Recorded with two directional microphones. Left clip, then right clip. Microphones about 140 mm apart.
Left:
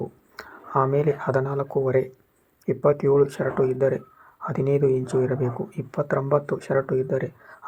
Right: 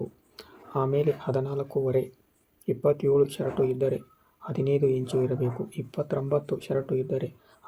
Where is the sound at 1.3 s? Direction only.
35° left (ahead or behind).